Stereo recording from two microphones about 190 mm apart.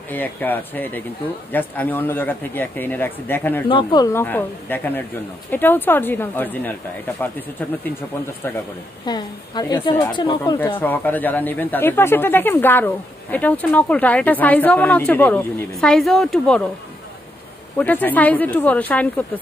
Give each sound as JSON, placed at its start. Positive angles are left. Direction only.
{"t": 0.1, "sound": "speech", "side_deg": 10}
{"t": 3.6, "sound": "speech", "side_deg": 25}
{"t": 9.0, "sound": "a woman's voice", "side_deg": 20}
{"t": 10.4, "sound": "speech", "side_deg": 15}
{"t": 17.7, "sound": "speech", "side_deg": 10}